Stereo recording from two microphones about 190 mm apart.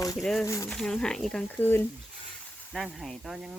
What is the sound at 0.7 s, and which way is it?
Speech, centre (ahead or behind).